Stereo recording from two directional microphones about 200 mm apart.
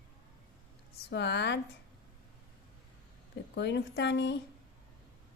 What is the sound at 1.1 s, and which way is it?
Speech, 60° left (ahead or behind).